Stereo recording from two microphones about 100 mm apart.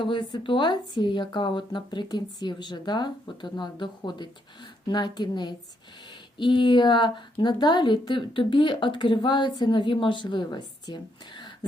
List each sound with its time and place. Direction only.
0.0 s speech: 50° left (ahead or behind)